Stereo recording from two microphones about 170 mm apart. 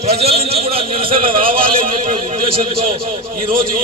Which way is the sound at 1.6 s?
55° right (ahead or behind).